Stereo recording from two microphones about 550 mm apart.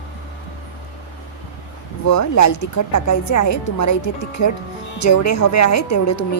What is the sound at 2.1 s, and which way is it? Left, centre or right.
A woman's voice, left.